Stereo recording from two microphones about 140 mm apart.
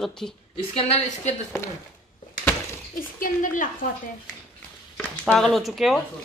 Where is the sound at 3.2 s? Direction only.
70° left (ahead or behind).